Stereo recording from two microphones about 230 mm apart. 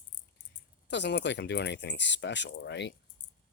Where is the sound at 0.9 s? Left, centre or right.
Left.